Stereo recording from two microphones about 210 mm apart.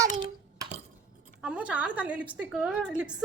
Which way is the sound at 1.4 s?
5° right (ahead or behind).